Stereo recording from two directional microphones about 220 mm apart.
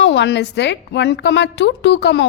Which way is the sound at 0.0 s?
55° left (ahead or behind).